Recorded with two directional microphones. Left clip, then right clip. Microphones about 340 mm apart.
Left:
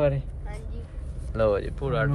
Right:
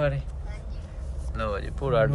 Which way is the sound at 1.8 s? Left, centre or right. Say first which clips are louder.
Right 4 dB; centre.